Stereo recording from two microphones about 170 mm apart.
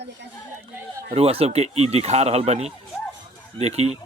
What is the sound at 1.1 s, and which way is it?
Speech, 35° right (ahead or behind).